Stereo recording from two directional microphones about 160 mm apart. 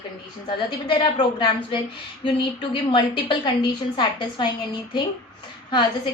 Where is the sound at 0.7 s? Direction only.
30° left (ahead or behind).